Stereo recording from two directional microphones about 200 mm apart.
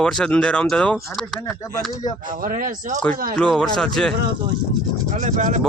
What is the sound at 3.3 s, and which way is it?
Speech, 5° left (ahead or behind).